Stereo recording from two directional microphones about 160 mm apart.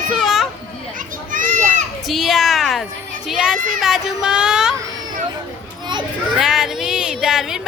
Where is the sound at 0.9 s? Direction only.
55° right (ahead or behind).